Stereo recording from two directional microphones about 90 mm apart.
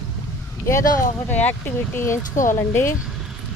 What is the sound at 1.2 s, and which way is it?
Speech, 20° left (ahead or behind).